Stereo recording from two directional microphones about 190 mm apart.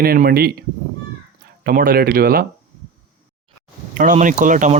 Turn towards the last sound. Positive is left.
turn(degrees=-40)  # may be behind; listen again after turning